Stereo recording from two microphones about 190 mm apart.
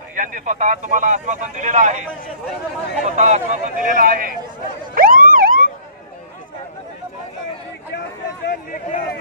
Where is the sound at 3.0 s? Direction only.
40° right (ahead or behind).